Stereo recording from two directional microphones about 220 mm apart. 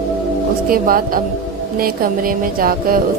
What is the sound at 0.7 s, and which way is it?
Speech, 40° right (ahead or behind).